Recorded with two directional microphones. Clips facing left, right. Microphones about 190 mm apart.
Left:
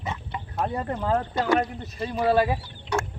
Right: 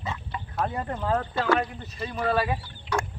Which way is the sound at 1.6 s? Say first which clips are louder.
Left 3 dB; 40° left (ahead or behind).